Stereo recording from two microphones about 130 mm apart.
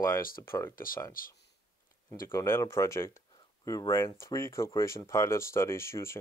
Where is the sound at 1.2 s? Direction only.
90° left.